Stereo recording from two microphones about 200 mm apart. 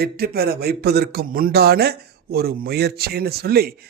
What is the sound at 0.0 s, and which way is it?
Speech, 50° right (ahead or behind).